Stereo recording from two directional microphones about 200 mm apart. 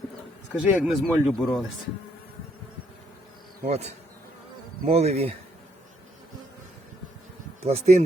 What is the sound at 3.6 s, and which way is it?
Speech, 30° right (ahead or behind).